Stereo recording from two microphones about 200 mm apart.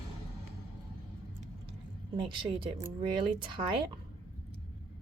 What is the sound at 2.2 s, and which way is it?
A woman's voice, 25° right (ahead or behind).